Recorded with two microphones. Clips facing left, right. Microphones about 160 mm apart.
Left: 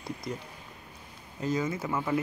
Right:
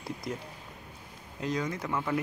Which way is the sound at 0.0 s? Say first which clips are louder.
Even; centre (ahead or behind).